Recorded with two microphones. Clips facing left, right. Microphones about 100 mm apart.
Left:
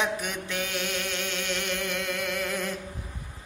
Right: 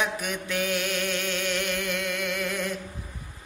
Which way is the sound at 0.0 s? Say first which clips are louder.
Even; 25° left (ahead or behind).